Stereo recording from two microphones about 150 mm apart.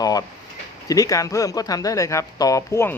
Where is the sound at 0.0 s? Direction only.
25° left (ahead or behind).